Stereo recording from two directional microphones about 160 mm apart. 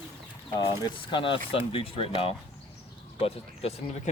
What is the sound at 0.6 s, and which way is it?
Speech, 30° left (ahead or behind).